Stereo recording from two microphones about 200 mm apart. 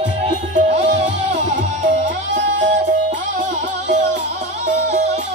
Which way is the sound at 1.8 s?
65° right (ahead or behind).